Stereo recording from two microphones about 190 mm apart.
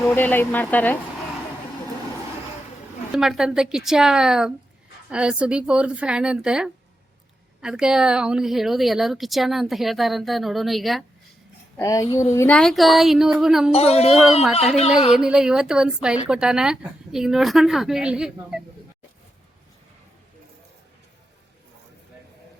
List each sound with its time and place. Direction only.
0.0 s speech: 10° left (ahead or behind)
3.1 s a woman's voice: centre (ahead or behind)
11.8 s a woman's voice: 15° left (ahead or behind); by 13.7 s centre (ahead or behind)
13.7 s speech: 35° left (ahead or behind)
14.1 s a woman's voice: centre (ahead or behind)